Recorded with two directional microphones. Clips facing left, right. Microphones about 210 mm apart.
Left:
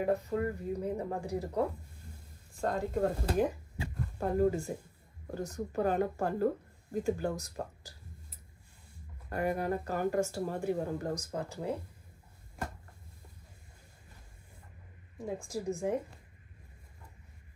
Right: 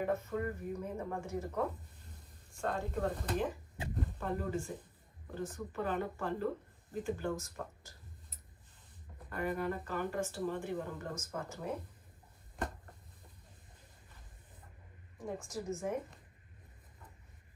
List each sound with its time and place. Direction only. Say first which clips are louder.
0.0 s speech: left 4 dB; 35° left (ahead or behind)
3.7 s speech: even; 20° right (ahead or behind)
4.2 s speech: left 10 dB; 40° left (ahead or behind)
9.3 s speech: left 4 dB; 40° left (ahead or behind)
15.4 s speech: left 5 dB; 30° left (ahead or behind)